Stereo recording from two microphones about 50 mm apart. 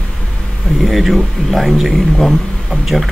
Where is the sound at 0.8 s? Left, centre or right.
Centre.